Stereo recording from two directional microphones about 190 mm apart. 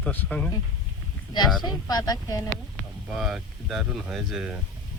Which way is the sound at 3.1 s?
Centre (ahead or behind).